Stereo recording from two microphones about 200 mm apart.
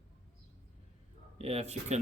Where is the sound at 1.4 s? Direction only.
30° right (ahead or behind).